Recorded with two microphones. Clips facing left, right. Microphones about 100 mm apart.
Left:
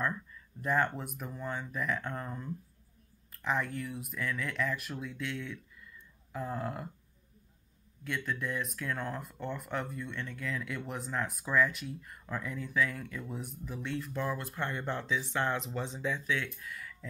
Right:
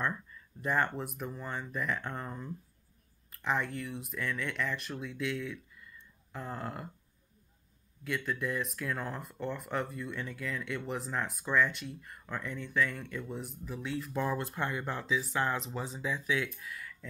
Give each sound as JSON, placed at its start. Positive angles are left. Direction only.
{"t": 0.0, "sound": "speech", "side_deg": 0}
{"t": 8.0, "sound": "speech", "side_deg": 0}
{"t": 14.1, "sound": "speech", "side_deg": -20}
{"t": 14.6, "sound": "speech", "side_deg": -10}